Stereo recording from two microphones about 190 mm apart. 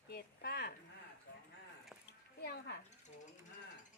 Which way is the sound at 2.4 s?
55° left (ahead or behind).